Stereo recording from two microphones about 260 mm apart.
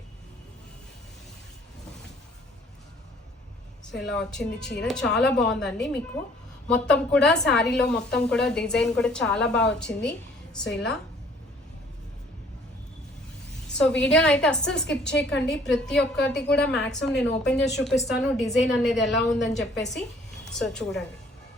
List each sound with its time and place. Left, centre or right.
3.9 s a woman's voice: centre
13.7 s a woman's voice: centre
15.0 s a woman's voice: left
15.3 s a woman's voice: centre